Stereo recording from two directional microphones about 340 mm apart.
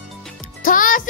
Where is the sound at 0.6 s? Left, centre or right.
Left.